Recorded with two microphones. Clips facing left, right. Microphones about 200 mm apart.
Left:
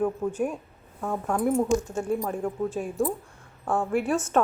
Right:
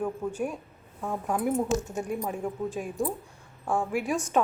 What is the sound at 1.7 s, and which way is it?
Speech, 20° right (ahead or behind).